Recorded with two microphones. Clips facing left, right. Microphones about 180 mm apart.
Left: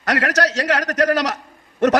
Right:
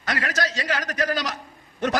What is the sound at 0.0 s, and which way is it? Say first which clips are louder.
A man's voice: left 7 dB; 85° left.